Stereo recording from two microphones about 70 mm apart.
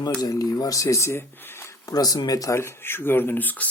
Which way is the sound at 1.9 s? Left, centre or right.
Left.